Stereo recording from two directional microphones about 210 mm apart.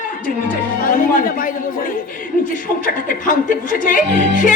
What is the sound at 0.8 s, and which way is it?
Speech, 40° left (ahead or behind).